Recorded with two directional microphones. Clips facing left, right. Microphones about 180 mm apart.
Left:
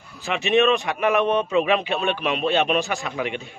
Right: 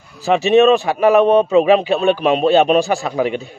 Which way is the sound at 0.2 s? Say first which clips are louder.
Right 8 dB; 40° right (ahead or behind).